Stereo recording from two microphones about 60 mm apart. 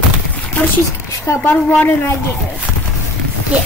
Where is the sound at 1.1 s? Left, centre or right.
Left.